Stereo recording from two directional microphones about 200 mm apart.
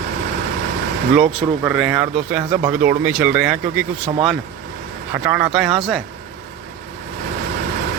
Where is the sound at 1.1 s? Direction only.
5° right (ahead or behind).